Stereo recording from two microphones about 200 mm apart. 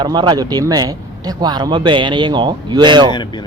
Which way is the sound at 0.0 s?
20° right (ahead or behind).